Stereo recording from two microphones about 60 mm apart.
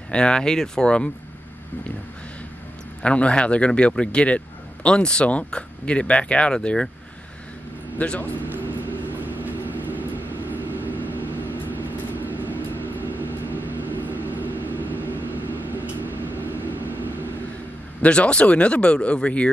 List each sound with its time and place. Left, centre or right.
0.1 s speech: centre
3.0 s speech: centre
8.0 s speech: left
9.2 s vehicle: right
18.0 s speech: centre